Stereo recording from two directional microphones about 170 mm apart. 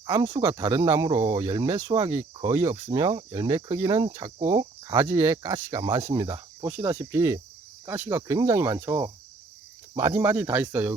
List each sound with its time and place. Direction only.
0.1 s speech: 25° right (ahead or behind)
4.9 s cricket: 15° right (ahead or behind)